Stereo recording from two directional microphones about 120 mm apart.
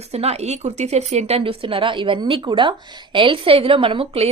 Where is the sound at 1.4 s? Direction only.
45° right (ahead or behind).